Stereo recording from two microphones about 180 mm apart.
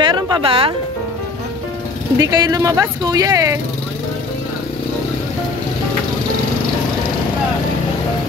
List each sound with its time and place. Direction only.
0.0 s music: 25° right (ahead or behind)
2.1 s speech: 20° right (ahead or behind)